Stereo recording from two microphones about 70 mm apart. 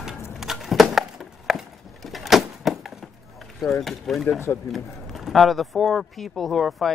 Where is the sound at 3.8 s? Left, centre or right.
Centre.